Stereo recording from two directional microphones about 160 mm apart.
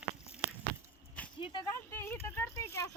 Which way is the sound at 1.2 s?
10° left (ahead or behind).